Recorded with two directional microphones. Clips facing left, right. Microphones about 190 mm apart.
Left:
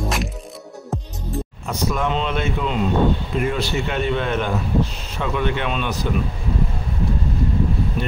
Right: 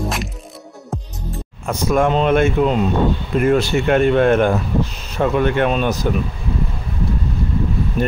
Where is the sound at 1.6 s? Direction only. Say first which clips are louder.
Right 7 dB; 50° right (ahead or behind).